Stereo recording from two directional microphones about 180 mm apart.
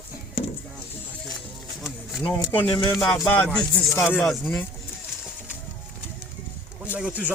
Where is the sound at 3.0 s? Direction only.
5° left (ahead or behind).